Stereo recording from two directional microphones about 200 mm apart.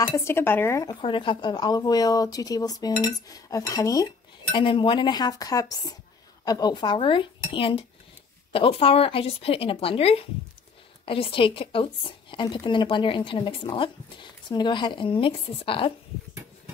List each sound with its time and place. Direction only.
0.1 s speech: 15° left (ahead or behind)